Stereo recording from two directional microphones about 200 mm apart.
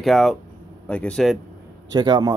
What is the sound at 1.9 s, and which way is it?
Speech, 20° right (ahead or behind).